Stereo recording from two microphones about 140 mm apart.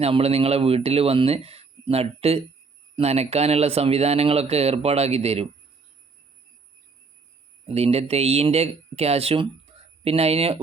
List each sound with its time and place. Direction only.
0.0 s speech: 45° right (ahead or behind)
7.7 s speech: 45° right (ahead or behind)